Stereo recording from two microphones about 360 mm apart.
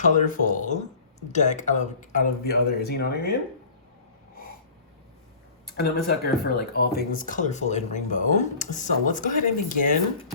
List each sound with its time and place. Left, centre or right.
0.0 s speech: left
6.1 s speech: left